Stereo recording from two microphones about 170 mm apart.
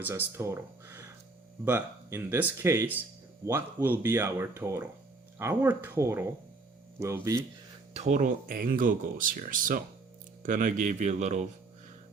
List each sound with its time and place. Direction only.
0.0 s speech: 15° right (ahead or behind)
7.9 s speech: 45° right (ahead or behind)